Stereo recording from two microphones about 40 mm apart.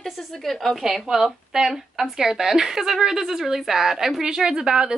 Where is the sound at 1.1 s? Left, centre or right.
Centre.